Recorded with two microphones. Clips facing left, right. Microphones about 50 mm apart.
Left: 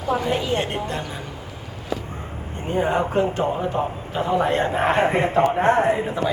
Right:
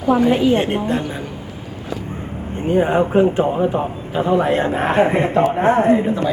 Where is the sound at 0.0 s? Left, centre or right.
Centre.